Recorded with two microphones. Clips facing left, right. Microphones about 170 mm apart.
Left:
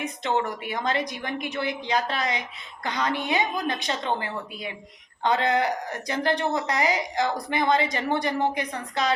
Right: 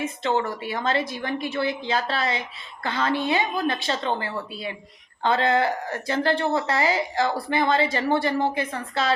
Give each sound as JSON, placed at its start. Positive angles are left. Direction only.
{"t": 0.0, "sound": "speech", "side_deg": 15}